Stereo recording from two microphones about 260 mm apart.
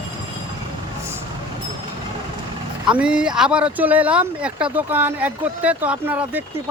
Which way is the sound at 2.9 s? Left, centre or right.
Centre.